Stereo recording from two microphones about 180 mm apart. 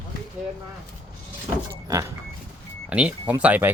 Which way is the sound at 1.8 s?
20° right (ahead or behind).